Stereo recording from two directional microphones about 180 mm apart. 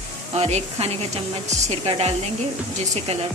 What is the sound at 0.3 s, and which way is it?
A woman's voice, 35° right (ahead or behind).